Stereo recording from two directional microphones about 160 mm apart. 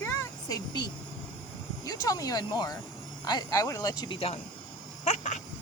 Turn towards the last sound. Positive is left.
turn(degrees=45)  # may be behind; listen again after turning